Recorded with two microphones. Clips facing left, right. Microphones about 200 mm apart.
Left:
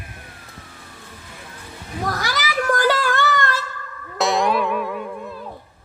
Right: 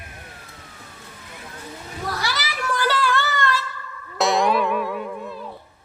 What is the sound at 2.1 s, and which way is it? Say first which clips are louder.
Children playing: left 2 dB; 45° left (ahead or behind).